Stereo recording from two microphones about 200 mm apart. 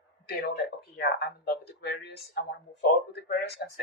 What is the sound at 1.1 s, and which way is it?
Speech, 55° left (ahead or behind).